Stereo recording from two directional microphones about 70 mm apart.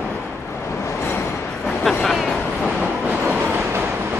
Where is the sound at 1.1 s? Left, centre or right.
Left.